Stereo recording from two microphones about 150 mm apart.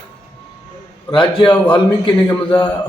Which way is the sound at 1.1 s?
35° left (ahead or behind).